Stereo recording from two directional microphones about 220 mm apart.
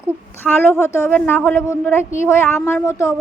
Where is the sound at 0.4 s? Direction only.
10° left (ahead or behind).